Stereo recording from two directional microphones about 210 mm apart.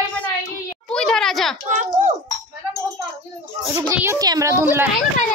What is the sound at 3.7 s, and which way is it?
A child's voice, 10° right (ahead or behind).